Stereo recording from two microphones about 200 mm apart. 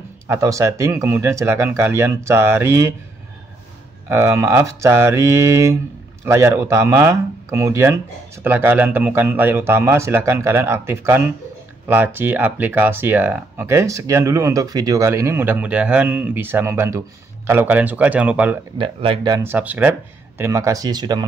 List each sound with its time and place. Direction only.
0.3 s speech: 15° right (ahead or behind)
4.1 s speech: 15° right (ahead or behind)
18.8 s speech: 25° right (ahead or behind)